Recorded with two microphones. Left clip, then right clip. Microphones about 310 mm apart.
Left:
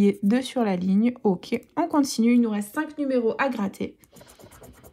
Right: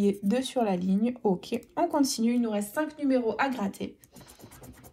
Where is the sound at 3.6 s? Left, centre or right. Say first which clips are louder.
Left 4 dB; left.